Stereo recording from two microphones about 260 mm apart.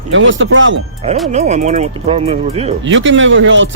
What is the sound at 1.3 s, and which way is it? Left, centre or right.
Speech, right.